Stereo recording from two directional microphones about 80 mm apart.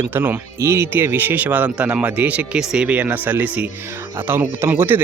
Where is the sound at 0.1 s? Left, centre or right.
Right.